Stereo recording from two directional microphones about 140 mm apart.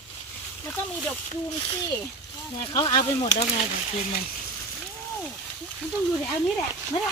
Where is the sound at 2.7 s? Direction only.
25° left (ahead or behind).